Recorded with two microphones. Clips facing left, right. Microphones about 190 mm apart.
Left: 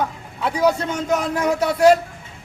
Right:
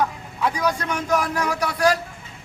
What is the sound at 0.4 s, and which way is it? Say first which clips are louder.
A man's voice: left 4 dB; 25° left (ahead or behind).